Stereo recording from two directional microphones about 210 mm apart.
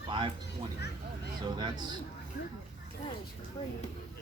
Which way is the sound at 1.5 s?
20° right (ahead or behind).